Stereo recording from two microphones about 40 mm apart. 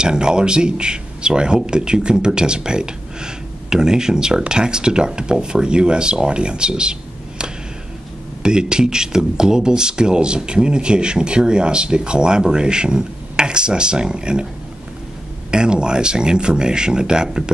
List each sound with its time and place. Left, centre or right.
0.0 s speech: right
15.5 s speech: right